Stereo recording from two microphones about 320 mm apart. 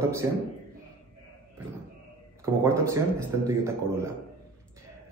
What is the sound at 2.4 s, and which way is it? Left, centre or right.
A man's voice, centre.